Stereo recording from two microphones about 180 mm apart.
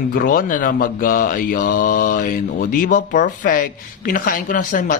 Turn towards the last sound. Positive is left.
turn(degrees=45)  # may be behind; listen again after turning